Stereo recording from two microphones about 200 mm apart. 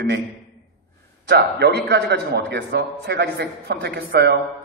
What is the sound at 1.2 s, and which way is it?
A man's voice, 55° right (ahead or behind).